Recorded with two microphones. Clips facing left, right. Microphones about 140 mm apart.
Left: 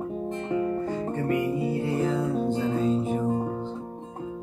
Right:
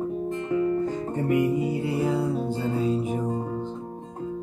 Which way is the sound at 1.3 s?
15° right (ahead or behind).